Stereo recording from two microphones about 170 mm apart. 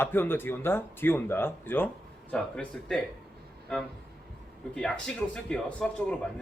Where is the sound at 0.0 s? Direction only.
15° left (ahead or behind).